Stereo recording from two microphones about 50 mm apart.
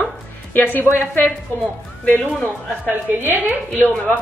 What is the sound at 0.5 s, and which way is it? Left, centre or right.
A woman's voice, left.